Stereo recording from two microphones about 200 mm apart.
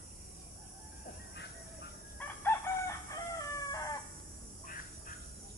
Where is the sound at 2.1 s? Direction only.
10° left (ahead or behind).